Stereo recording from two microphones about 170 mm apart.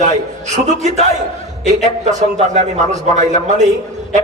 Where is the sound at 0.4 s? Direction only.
45° right (ahead or behind).